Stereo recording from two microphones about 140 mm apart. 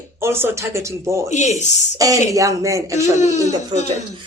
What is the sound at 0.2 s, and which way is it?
Speech, 15° right (ahead or behind).